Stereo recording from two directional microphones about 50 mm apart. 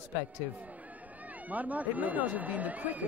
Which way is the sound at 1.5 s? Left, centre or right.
Right.